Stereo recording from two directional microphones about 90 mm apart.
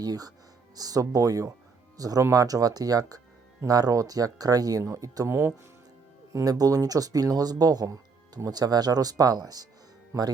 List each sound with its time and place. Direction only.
0.0 s speech: 45° right (ahead or behind)
5.3 s speech: 30° right (ahead or behind)
6.3 s speech: 45° right (ahead or behind)